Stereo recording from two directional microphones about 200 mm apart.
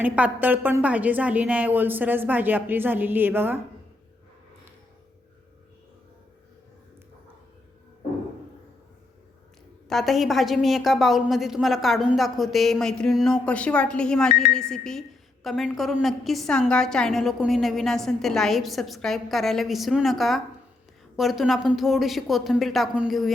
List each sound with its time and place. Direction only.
0.0 s a woman's voice: 10° right (ahead or behind)
9.9 s a woman's voice: centre (ahead or behind)